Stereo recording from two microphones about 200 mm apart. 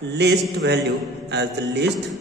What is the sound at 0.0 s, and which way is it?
A man's voice, 60° right (ahead or behind).